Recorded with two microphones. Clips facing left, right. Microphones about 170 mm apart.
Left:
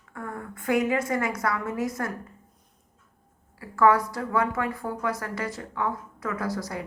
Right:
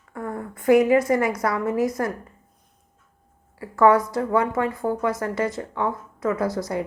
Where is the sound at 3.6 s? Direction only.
25° right (ahead or behind).